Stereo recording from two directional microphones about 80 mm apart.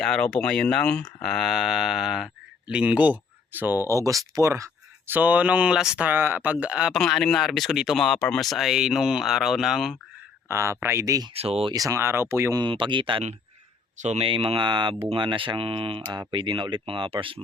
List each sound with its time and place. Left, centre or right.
0.0 s speech: centre; by 3.8 s right
3.8 s speech: right
5.0 s speech: right
6.1 s speech: right
6.9 s speech: centre
10.5 s speech: right
11.7 s speech: right
11.9 s speech: right
12.6 s speech: right
14.3 s speech: right
15.1 s speech: right